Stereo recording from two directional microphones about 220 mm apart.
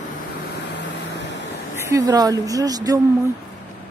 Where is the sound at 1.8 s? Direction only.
15° right (ahead or behind).